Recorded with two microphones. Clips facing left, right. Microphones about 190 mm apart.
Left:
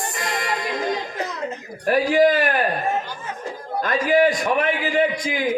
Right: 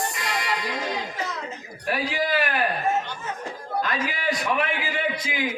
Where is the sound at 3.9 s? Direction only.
45° left (ahead or behind).